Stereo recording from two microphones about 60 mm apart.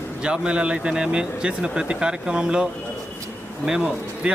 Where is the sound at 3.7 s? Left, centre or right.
Centre.